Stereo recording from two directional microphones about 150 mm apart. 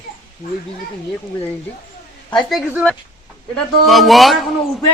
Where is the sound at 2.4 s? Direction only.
Centre (ahead or behind).